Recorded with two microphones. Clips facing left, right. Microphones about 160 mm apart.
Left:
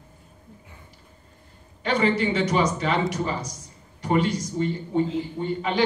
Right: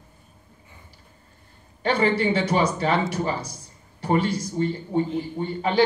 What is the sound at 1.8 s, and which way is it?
A man's voice, 30° right (ahead or behind).